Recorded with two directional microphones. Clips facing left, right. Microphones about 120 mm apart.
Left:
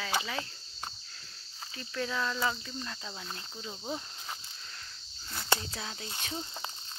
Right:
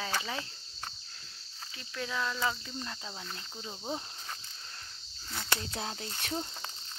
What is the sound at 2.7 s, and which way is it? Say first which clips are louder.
Cricket: even; 15° right (ahead or behind).